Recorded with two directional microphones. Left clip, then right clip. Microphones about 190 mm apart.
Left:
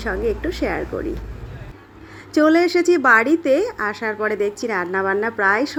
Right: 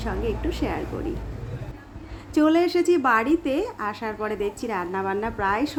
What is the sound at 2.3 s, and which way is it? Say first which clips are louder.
A woman's voice: left 5 dB; 15° left (ahead or behind).